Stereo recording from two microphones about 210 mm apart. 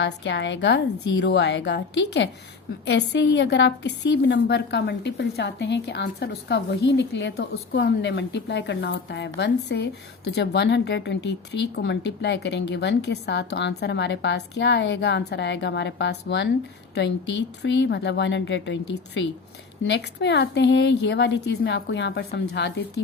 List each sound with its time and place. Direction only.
0.0 s a woman's voice: 60° left (ahead or behind)
17.6 s a woman's voice: 55° left (ahead or behind)